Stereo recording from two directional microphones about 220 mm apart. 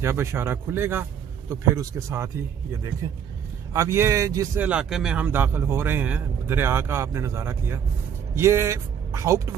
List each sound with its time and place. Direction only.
0.0 s speech: 10° right (ahead or behind)